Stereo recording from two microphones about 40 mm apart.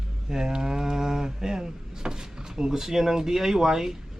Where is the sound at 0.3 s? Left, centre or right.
Centre.